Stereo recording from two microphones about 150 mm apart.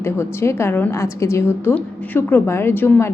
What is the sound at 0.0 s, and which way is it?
A woman's voice, 15° left (ahead or behind).